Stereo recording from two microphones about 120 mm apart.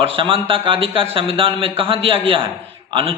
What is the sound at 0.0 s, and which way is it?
Speech, 50° right (ahead or behind).